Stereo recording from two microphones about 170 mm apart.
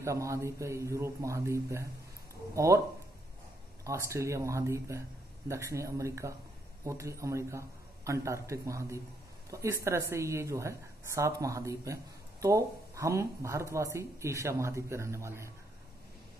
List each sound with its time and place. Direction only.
0.0 s speech: 20° right (ahead or behind)
3.8 s speech: 15° right (ahead or behind)